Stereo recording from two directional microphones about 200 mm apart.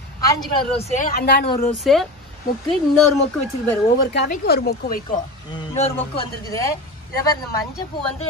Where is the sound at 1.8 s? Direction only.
Centre (ahead or behind).